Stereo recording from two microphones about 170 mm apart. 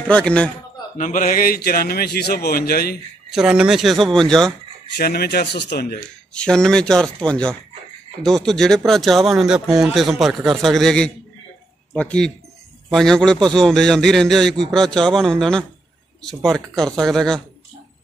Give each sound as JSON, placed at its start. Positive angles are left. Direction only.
{"t": 0.1, "sound": "a man's voice", "side_deg": 5}
{"t": 0.9, "sound": "a man's voice", "side_deg": 50}
{"t": 3.3, "sound": "speech", "side_deg": -5}
{"t": 4.9, "sound": "a man's voice", "side_deg": 65}
{"t": 6.3, "sound": "speech", "side_deg": 5}